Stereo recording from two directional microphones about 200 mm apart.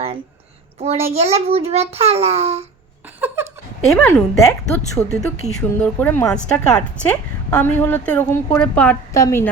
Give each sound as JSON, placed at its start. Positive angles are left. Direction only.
{"t": 0.8, "sound": "a child's voice", "side_deg": -30}
{"t": 3.2, "sound": "laughter", "side_deg": -10}
{"t": 3.8, "sound": "a woman's voice", "side_deg": 5}
{"t": 4.1, "sound": "a woman's voice", "side_deg": 15}
{"t": 5.1, "sound": "a woman's voice", "side_deg": 5}